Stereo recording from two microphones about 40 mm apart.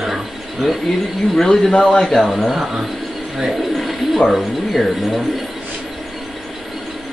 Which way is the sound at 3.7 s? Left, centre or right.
Centre.